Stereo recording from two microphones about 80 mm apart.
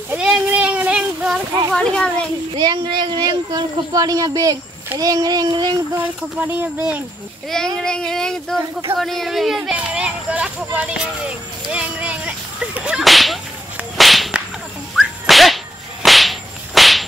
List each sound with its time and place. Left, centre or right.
0.2 s children playing: centre
1.7 s speech: centre
2.5 s speech: right
5.9 s speech: right
7.4 s speech: centre
9.6 s speech: centre
11.7 s a sound: centre
13.0 s whip: centre